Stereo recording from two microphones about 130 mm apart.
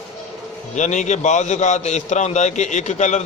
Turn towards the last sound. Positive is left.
turn(degrees=65)  # may be behind; listen again after turning